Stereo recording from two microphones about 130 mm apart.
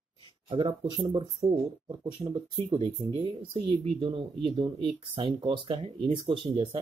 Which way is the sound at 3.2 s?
45° right (ahead or behind).